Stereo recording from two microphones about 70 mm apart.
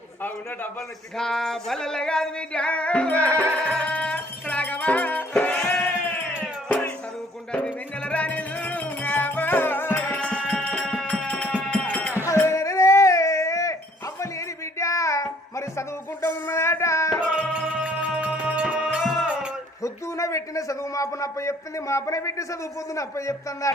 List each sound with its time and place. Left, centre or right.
1.1 s singing: centre
3.2 s music: right
3.8 s music: centre
7.5 s music: centre
10.2 s music: centre
12.4 s music: left
16.2 s a sound: left
17.3 s music: centre
19.8 s a man's voice: left